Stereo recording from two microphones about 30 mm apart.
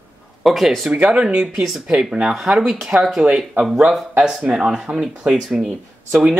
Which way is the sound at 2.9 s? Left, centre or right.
Right.